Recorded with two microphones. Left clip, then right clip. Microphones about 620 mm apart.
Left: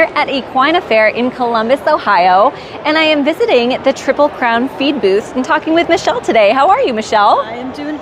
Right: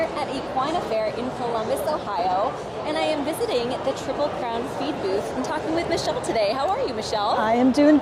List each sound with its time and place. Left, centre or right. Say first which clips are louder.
0.2 s a woman's voice: left 13 dB; left